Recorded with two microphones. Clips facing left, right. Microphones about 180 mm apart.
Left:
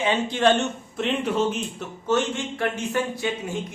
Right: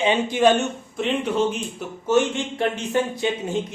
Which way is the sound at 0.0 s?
15° right (ahead or behind).